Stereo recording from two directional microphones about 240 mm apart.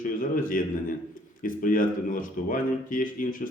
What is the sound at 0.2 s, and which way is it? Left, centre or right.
A man's voice, left.